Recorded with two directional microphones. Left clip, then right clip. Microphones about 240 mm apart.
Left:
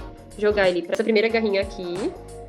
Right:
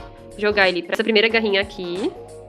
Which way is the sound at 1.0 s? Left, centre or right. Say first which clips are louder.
Right 4 dB; right.